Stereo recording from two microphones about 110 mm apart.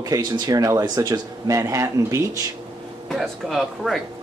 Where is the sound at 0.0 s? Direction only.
35° right (ahead or behind).